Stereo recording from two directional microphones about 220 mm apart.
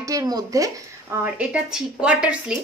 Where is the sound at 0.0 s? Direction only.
15° right (ahead or behind).